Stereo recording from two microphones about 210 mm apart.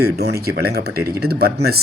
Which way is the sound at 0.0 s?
50° right (ahead or behind).